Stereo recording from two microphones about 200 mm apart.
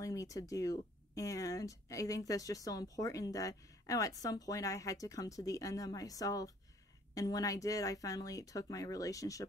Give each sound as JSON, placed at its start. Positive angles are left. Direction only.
{"t": 0.0, "sound": "speech", "side_deg": 15}